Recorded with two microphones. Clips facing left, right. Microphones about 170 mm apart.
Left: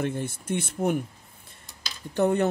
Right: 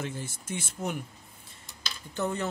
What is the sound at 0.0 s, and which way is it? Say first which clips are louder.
Speech: left 7 dB; 60° left (ahead or behind).